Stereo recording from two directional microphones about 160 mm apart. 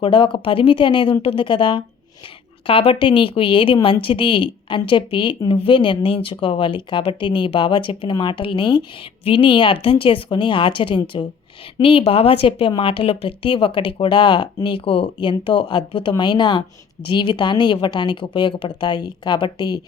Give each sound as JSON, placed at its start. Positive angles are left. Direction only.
{"t": 0.0, "sound": "a woman's voice", "side_deg": 30}